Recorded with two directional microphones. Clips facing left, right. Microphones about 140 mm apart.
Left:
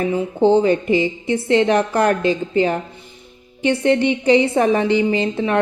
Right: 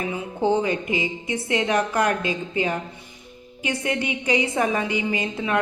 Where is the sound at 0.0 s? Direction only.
35° left (ahead or behind).